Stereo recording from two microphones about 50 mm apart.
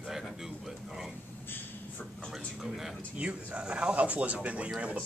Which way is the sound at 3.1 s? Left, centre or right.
Right.